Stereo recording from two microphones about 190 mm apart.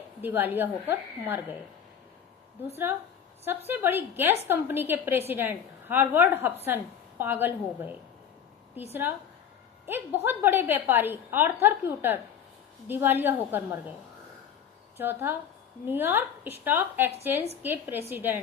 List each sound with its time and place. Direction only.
0.2 s a woman's voice: 10° right (ahead or behind)
3.7 s a woman's voice: 10° right (ahead or behind)
8.9 s a woman's voice: 10° right (ahead or behind)
14.9 s a woman's voice: 10° right (ahead or behind)